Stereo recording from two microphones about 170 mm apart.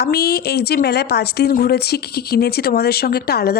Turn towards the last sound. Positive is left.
turn(degrees=65)  # may be behind; listen again after turning